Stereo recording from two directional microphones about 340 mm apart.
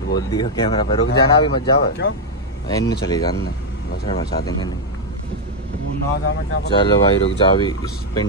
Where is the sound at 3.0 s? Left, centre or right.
Centre.